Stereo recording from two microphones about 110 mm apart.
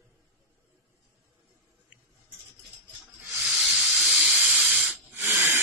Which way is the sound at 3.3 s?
Centre (ahead or behind).